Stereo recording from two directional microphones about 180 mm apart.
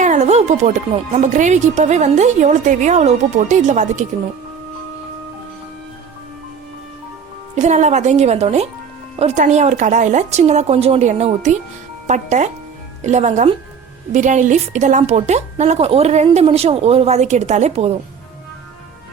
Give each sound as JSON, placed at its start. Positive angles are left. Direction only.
{"t": 0.0, "sound": "speech", "side_deg": -40}
{"t": 7.5, "sound": "speech", "side_deg": -40}